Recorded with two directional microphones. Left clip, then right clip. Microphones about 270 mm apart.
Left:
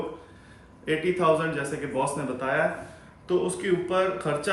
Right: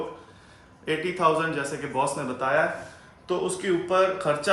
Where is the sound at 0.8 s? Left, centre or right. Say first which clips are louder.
Even; centre.